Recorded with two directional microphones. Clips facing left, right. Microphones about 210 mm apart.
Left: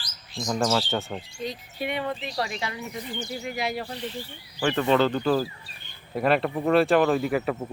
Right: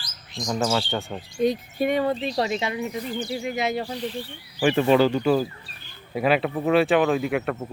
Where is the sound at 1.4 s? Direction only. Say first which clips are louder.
Right 12 dB; 50° right (ahead or behind).